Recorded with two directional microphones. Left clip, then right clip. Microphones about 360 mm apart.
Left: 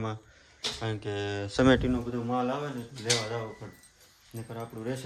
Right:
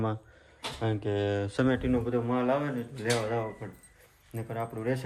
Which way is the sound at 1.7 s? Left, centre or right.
Centre.